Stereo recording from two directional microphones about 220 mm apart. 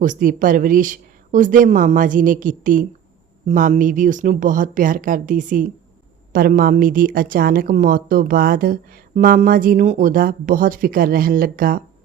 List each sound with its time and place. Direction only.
0.0 s a woman's voice: 35° right (ahead or behind)